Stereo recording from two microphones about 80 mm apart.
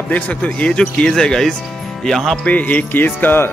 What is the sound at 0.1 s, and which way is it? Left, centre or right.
Speech, centre.